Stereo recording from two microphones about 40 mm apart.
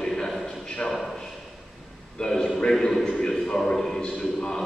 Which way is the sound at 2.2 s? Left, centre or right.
Centre.